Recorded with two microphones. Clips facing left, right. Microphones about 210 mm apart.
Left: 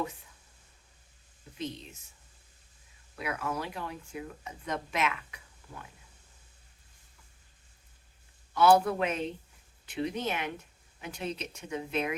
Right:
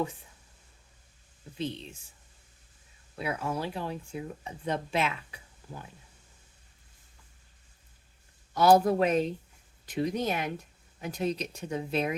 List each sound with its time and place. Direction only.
1.5 s speech: 30° right (ahead or behind)
3.2 s speech: 30° right (ahead or behind)
8.5 s speech: 40° right (ahead or behind)